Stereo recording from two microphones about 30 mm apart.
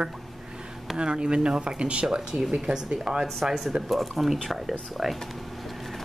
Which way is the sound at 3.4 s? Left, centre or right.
Centre.